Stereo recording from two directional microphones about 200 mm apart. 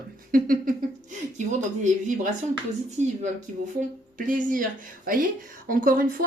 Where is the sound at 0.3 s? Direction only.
45° right (ahead or behind).